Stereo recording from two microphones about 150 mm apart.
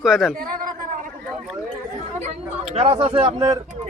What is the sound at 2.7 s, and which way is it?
Speech, 40° right (ahead or behind).